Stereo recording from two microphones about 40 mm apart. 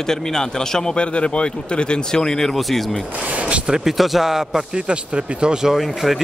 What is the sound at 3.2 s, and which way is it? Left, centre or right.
Speech, right.